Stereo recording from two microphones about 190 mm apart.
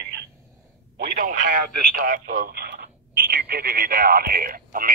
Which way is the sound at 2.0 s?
45° right (ahead or behind).